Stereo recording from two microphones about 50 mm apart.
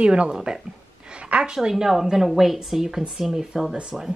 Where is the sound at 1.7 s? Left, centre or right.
Centre.